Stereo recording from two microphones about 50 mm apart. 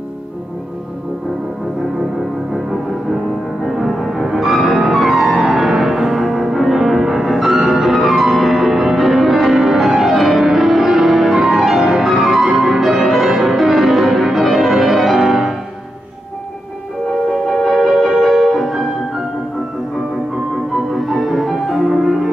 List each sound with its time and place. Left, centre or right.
2.5 s music: centre
17.6 s music: centre
20.7 s music: centre